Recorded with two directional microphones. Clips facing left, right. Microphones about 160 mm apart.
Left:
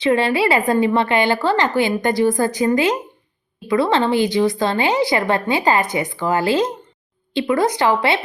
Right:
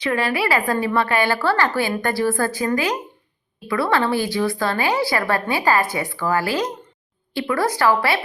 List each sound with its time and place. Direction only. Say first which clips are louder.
0.0 s a woman's voice: left 5 dB; 25° left (ahead or behind)